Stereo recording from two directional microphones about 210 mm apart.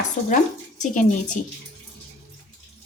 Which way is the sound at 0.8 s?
35° left (ahead or behind).